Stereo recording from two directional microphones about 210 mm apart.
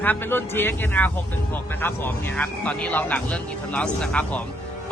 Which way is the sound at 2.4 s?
5° left (ahead or behind).